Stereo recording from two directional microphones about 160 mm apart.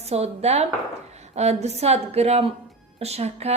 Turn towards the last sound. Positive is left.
turn(degrees=-40)  # may be behind; listen again after turning